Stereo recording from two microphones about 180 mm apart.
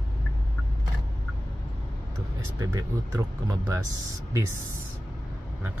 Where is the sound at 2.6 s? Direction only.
20° right (ahead or behind).